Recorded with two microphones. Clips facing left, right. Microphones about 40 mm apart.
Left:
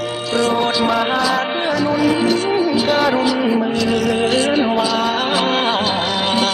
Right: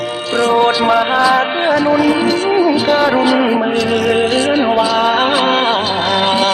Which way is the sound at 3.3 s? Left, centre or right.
Right.